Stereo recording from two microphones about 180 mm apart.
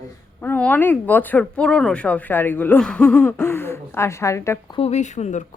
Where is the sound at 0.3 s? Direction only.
10° left (ahead or behind).